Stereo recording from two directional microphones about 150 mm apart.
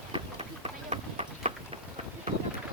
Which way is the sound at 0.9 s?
40° right (ahead or behind).